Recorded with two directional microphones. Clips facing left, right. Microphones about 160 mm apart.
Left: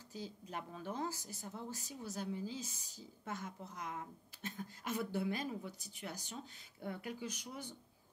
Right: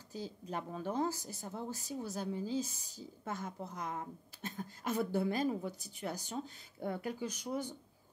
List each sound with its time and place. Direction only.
0.1 s a woman's voice: 35° right (ahead or behind)